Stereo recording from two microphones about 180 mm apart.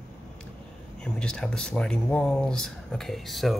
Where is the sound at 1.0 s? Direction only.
5° left (ahead or behind).